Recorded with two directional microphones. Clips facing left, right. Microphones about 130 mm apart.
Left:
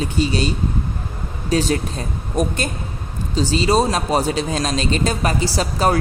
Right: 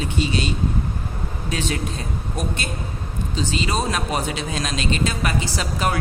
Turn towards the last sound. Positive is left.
turn(degrees=35)  # may be behind; listen again after turning